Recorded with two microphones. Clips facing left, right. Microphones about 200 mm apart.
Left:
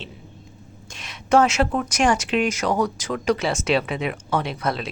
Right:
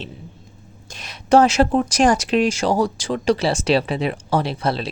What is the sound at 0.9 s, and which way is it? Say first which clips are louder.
Speech: right 4 dB; 35° right (ahead or behind).